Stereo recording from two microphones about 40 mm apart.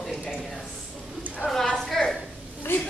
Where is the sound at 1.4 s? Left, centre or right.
Right.